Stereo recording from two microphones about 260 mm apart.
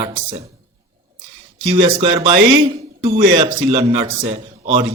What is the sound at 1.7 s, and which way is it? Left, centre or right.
Speech, centre.